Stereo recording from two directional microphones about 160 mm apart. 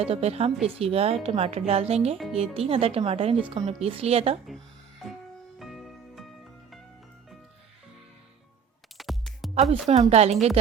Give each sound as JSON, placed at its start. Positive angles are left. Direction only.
{"t": 0.0, "sound": "speech", "side_deg": -40}
{"t": 5.5, "sound": "music", "side_deg": 0}
{"t": 9.0, "sound": "music", "side_deg": 0}
{"t": 9.6, "sound": "a woman's voice", "side_deg": -40}